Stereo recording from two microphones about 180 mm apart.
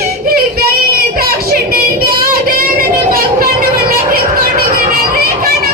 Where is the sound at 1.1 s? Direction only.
55° right (ahead or behind).